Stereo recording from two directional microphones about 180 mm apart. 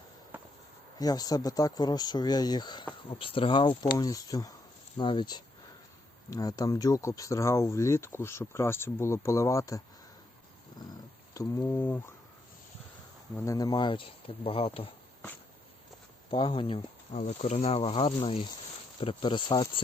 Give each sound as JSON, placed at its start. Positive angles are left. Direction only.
{"t": 0.9, "sound": "speech", "side_deg": 20}
{"t": 10.8, "sound": "purr", "side_deg": 20}
{"t": 13.3, "sound": "speech", "side_deg": 15}
{"t": 16.3, "sound": "speech", "side_deg": 30}